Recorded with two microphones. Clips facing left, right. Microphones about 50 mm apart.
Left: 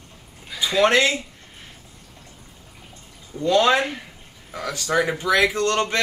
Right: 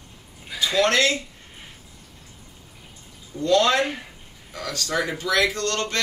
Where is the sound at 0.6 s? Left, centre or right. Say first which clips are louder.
Left 2 dB; centre.